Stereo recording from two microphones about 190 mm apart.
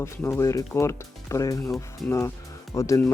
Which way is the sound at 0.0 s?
15° left (ahead or behind).